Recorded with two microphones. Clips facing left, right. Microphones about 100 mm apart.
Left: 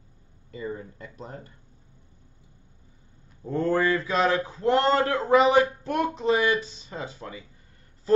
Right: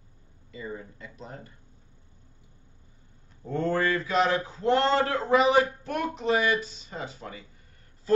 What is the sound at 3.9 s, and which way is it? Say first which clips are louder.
Speech: left 1 dB; 30° left (ahead or behind).